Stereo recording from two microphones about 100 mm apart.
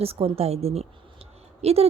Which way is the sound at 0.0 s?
80° right.